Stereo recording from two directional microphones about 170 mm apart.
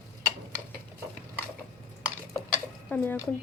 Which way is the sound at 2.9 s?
10° left (ahead or behind).